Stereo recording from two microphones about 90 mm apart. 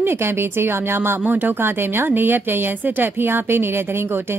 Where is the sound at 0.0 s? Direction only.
25° right (ahead or behind).